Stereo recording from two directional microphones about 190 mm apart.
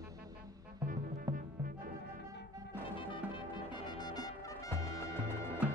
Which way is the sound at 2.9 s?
25° left (ahead or behind).